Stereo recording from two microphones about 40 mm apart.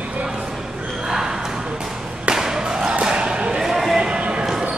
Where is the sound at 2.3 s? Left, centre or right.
Centre.